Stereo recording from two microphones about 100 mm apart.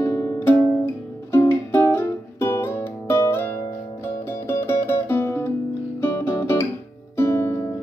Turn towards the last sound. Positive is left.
turn(degrees=25)  # may be behind; listen again after turning